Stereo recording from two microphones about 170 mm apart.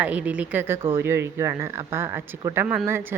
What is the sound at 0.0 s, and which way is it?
Speech, 10° right (ahead or behind).